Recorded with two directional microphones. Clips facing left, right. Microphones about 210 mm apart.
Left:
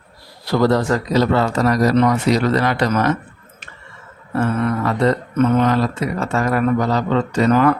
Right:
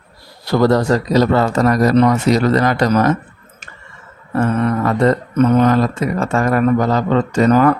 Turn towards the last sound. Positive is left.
turn(degrees=-45)  # may be behind; listen again after turning